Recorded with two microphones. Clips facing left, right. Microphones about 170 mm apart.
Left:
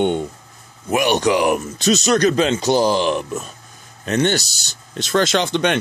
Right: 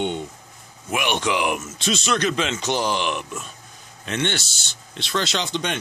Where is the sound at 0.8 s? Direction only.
40° left (ahead or behind).